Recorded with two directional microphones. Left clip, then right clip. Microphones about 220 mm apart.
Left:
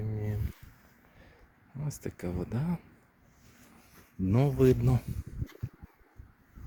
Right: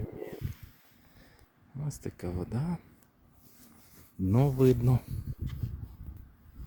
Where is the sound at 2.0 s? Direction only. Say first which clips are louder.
Left 1 dB; 5° right (ahead or behind).